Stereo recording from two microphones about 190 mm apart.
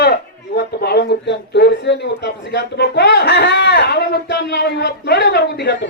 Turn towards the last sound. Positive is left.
turn(degrees=65)  # may be behind; listen again after turning